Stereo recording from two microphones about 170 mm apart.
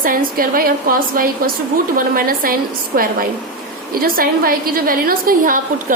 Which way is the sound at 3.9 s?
60° right (ahead or behind).